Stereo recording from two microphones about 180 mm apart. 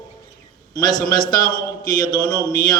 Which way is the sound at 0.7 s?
20° left (ahead or behind).